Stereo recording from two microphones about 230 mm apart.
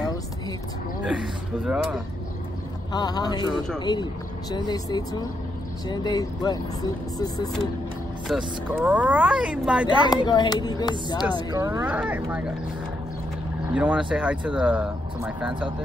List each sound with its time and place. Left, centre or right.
1.0 s speech: centre
2.9 s speech: centre
8.3 s speech: centre
10.0 s speech: centre
11.5 s speech: centre
13.7 s speech: centre